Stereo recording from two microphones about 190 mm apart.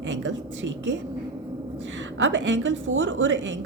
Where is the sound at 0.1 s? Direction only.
75° right (ahead or behind).